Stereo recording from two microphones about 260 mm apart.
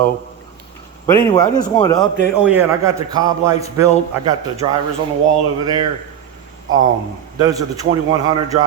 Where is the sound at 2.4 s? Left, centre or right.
Centre.